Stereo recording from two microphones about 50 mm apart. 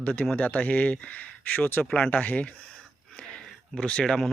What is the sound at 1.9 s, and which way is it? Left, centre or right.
Speech, centre.